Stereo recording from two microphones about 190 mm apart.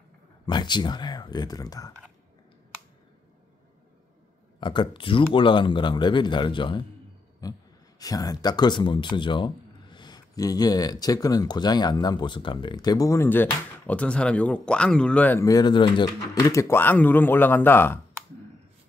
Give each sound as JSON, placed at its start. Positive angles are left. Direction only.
{"t": 0.5, "sound": "speech", "side_deg": 25}
{"t": 4.6, "sound": "speech", "side_deg": 25}
{"t": 7.4, "sound": "a sound", "side_deg": 20}
{"t": 8.0, "sound": "speech", "side_deg": 20}